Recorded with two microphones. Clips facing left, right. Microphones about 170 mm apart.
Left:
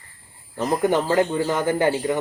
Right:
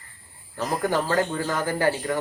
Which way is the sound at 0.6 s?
20° left (ahead or behind).